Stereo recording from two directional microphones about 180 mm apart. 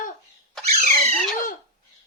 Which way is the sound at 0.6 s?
Centre (ahead or behind).